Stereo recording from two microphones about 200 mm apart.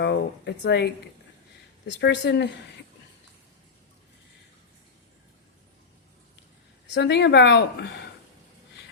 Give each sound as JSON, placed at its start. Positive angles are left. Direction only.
{"t": 0.0, "sound": "speech", "side_deg": 60}
{"t": 1.9, "sound": "a woman's voice", "side_deg": 60}
{"t": 6.9, "sound": "a woman's voice", "side_deg": 60}